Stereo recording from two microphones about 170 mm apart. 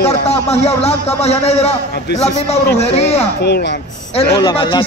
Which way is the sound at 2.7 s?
40° left (ahead or behind).